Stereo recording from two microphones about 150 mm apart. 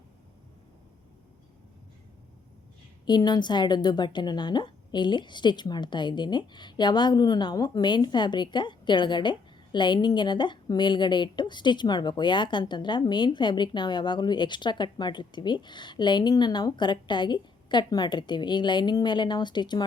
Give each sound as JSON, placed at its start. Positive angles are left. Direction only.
{"t": 3.1, "sound": "a woman's voice", "side_deg": 30}